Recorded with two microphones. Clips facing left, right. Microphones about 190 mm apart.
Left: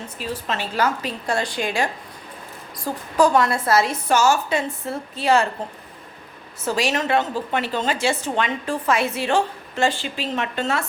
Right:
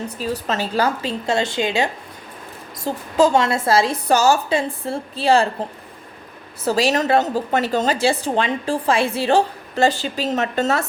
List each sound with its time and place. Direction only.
0.2 s a woman's voice: 40° right (ahead or behind)
6.7 s a woman's voice: 35° right (ahead or behind)